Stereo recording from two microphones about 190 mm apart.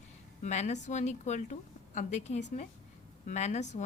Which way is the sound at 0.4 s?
35° left (ahead or behind).